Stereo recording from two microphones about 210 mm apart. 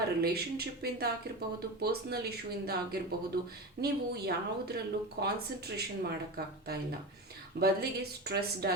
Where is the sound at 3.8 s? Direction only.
50° right (ahead or behind).